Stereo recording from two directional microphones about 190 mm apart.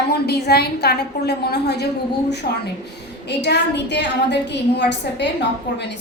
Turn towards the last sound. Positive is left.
turn(degrees=65)  # may be behind; listen again after turning